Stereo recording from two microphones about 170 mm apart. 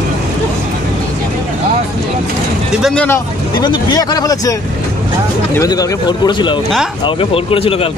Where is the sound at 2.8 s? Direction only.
5° left (ahead or behind).